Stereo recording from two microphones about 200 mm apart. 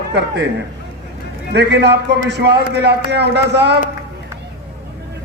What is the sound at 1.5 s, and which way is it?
A man's voice, 60° right (ahead or behind).